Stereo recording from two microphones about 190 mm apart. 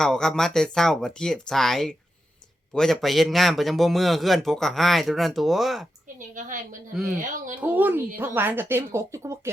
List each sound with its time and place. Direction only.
0.0 s a man's voice: 5° left (ahead or behind)
6.1 s a woman's voice: 45° right (ahead or behind)
7.5 s speech: 10° right (ahead or behind)